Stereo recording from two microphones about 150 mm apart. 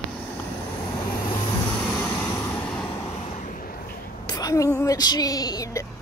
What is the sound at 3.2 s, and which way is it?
Vehicle, 55° left (ahead or behind).